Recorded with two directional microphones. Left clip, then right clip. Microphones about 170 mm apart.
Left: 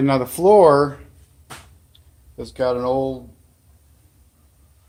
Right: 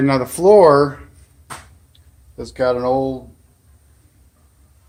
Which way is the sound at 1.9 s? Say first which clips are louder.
Even; centre (ahead or behind).